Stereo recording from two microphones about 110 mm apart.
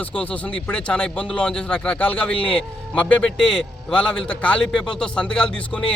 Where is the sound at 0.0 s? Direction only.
10° left (ahead or behind).